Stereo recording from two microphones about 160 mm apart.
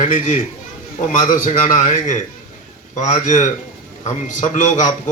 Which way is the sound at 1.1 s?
55° left (ahead or behind).